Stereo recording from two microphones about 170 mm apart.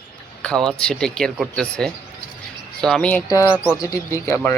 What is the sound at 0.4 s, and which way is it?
Speech, 5° left (ahead or behind).